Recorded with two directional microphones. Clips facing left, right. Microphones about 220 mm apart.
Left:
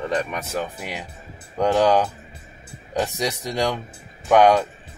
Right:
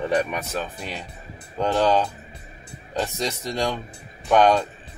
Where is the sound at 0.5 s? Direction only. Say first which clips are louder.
Left 2 dB; 15° left (ahead or behind).